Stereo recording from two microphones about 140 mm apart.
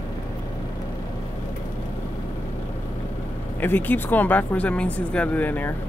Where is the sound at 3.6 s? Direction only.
15° left (ahead or behind).